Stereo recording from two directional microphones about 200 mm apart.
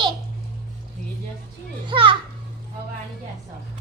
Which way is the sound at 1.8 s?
25° right (ahead or behind).